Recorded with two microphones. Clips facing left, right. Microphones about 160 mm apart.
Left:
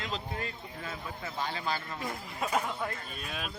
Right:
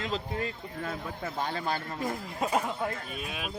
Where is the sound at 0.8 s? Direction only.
55° right (ahead or behind).